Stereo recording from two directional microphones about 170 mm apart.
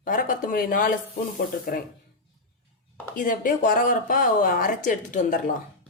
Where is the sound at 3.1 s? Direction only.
50° left (ahead or behind).